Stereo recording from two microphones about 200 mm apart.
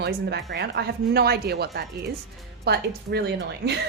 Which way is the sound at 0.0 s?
55° right (ahead or behind).